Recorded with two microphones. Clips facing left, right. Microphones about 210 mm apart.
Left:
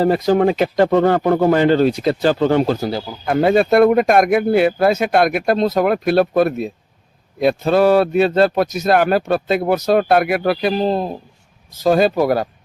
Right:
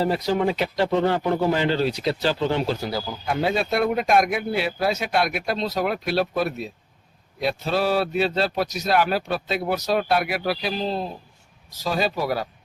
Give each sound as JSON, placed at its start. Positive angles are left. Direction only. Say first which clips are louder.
{"t": 0.0, "sound": "a man's voice", "louder": "left 7 dB", "side_deg": 50}